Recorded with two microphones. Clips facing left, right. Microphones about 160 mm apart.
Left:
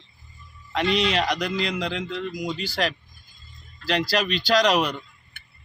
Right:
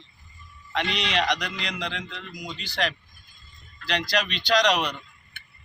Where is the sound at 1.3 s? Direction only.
5° left (ahead or behind).